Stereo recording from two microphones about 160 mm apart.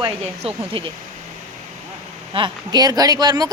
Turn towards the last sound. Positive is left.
turn(degrees=-25)  # may be behind; listen again after turning